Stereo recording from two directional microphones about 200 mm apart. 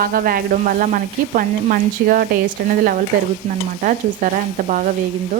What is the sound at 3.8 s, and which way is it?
Speech, 40° right (ahead or behind).